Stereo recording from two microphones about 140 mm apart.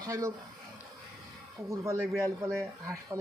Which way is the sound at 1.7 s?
20° right (ahead or behind).